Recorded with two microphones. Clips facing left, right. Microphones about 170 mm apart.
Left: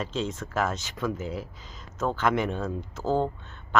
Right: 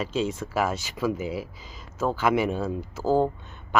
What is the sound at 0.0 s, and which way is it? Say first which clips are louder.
Speech: right 4 dB; 10° right (ahead or behind).